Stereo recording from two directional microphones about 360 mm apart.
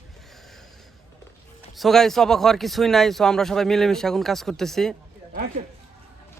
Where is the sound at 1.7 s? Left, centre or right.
Centre.